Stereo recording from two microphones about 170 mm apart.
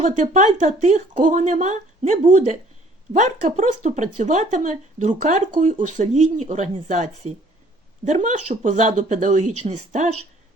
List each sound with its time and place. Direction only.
0.0 s speech: 45° right (ahead or behind)